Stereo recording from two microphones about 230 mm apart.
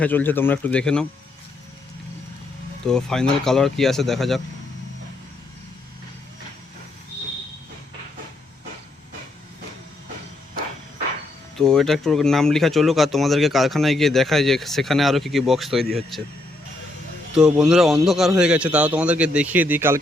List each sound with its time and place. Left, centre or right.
0.0 s speech: centre
2.8 s speech: centre
11.5 s speech: centre
17.3 s speech: centre